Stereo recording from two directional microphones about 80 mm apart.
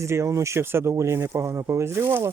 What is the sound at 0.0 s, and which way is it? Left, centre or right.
Speech, right.